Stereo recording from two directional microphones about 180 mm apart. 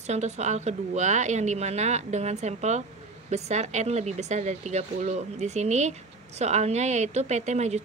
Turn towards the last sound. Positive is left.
turn(degrees=-40)  # may be behind; listen again after turning